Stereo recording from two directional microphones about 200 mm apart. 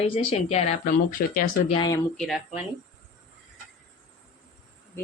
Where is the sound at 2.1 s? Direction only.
Centre (ahead or behind).